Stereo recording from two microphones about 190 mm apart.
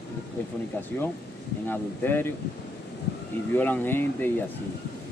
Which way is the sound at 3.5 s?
10° left (ahead or behind).